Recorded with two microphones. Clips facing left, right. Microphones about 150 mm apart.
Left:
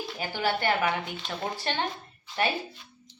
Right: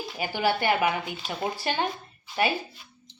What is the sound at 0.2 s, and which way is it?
A woman's voice, 10° right (ahead or behind).